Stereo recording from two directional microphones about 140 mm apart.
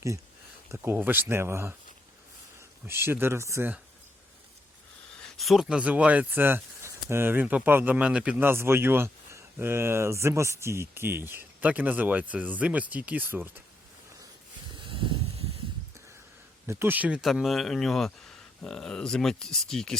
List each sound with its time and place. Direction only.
0.7 s speech: 15° right (ahead or behind)
2.8 s speech: 15° right (ahead or behind)
5.2 s speech: centre (ahead or behind)
14.8 s snake: 40° right (ahead or behind)
16.6 s speech: 15° right (ahead or behind); by 20.0 s 5° left (ahead or behind)